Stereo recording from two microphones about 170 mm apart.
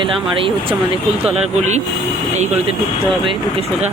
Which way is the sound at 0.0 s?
30° right (ahead or behind).